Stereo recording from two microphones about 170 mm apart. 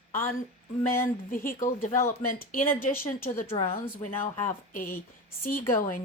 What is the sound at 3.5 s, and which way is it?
Speech, 35° left (ahead or behind).